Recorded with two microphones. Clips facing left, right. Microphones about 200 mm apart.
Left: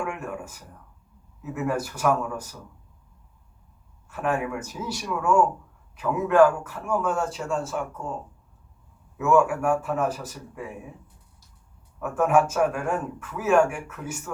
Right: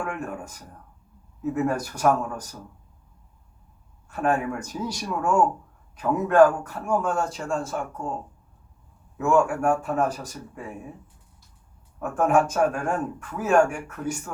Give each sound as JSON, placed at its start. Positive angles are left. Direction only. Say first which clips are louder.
{"t": 0.0, "sound": "speech", "louder": "even", "side_deg": -40}
{"t": 4.1, "sound": "speech", "louder": "right 2 dB", "side_deg": -40}
{"t": 9.1, "sound": "speech", "louder": "left 1 dB", "side_deg": -45}
{"t": 11.9, "sound": "speech", "louder": "even", "side_deg": -40}